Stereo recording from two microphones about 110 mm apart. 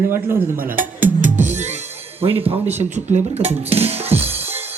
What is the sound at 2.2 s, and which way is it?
Speech, 60° right (ahead or behind).